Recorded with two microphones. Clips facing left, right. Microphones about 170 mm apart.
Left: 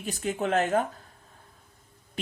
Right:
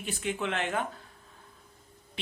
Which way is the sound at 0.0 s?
40° left (ahead or behind).